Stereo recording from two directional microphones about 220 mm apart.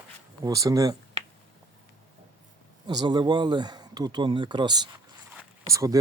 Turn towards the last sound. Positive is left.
turn(degrees=-15)  # may be behind; listen again after turning